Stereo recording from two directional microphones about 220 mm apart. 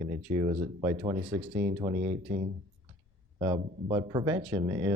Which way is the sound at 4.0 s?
20° right (ahead or behind).